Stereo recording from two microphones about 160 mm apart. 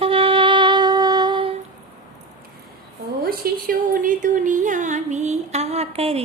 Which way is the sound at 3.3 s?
65° right (ahead or behind).